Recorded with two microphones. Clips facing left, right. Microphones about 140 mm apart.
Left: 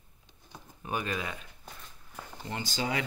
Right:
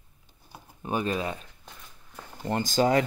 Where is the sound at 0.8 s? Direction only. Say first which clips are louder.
Right 6 dB; 30° right (ahead or behind).